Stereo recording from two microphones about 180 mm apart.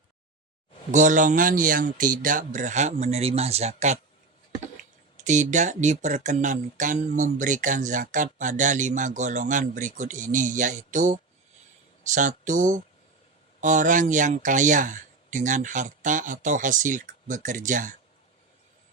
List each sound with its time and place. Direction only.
0.9 s speech: 45° right (ahead or behind)
5.1 s speech: 45° right (ahead or behind)